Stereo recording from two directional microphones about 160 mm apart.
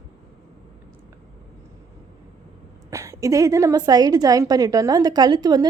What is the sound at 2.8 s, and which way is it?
A woman's voice, 20° right (ahead or behind).